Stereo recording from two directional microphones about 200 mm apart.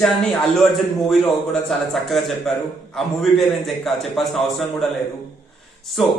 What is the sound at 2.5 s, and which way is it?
Speech, centre (ahead or behind).